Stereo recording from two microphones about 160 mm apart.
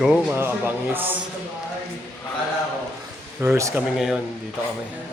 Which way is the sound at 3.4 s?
20° right (ahead or behind).